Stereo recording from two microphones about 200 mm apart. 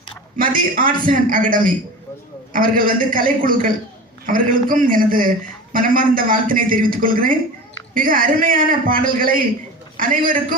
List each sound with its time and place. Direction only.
0.3 s a man's voice: 45° right (ahead or behind)